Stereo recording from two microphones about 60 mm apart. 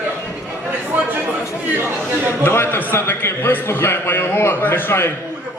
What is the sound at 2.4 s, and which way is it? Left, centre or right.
A man's voice, left.